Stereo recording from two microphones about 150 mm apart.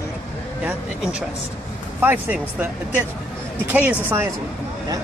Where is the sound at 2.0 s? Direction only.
10° right (ahead or behind).